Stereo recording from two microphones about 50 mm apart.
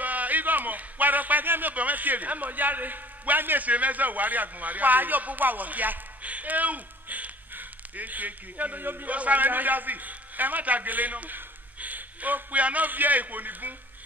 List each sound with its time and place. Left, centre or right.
0.0 s speech: right